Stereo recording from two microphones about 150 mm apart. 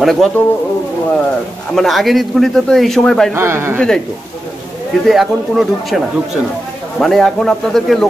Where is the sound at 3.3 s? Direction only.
15° right (ahead or behind).